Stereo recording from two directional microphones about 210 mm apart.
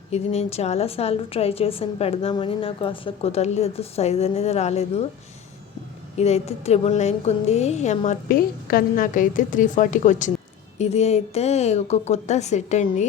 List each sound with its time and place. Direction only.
0.1 s a woman's voice: 30° left (ahead or behind)
6.1 s a woman's voice: 30° left (ahead or behind)